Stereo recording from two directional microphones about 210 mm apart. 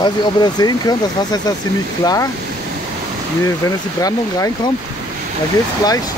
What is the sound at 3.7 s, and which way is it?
Speech, 15° left (ahead or behind).